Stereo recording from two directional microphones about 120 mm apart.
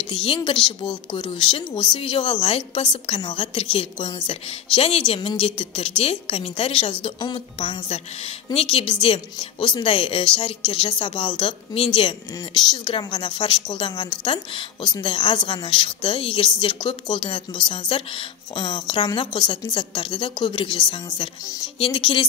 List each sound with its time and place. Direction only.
0.1 s speech: 45° left (ahead or behind)
7.3 s speech: 55° left (ahead or behind)